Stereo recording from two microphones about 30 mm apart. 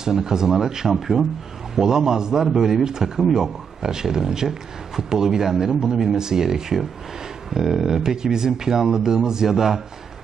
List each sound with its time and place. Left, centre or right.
0.0 s speech: right
1.8 s speech: centre
3.2 s speech: centre
3.8 s speech: centre